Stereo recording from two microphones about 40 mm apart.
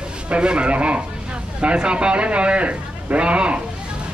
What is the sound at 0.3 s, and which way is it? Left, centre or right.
Speech, right.